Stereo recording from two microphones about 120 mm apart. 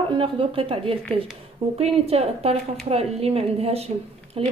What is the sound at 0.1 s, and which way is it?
Speech, 50° right (ahead or behind).